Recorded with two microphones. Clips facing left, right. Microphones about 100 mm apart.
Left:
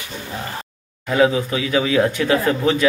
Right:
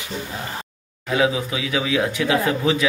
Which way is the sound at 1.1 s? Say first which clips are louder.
Left 4 dB; 5° right (ahead or behind).